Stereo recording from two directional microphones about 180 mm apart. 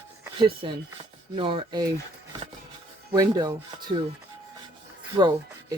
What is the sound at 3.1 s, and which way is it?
Speech, 20° right (ahead or behind).